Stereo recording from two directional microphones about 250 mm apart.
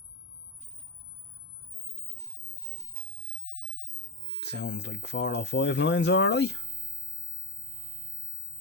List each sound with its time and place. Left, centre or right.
4.4 s speech: left